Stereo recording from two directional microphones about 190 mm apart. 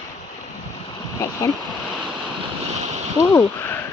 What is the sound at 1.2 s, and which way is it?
Speech, 20° left (ahead or behind).